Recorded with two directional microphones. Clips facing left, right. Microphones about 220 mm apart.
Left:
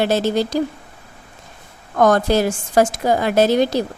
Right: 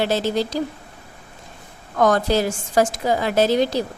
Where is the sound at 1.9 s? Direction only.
50° left (ahead or behind).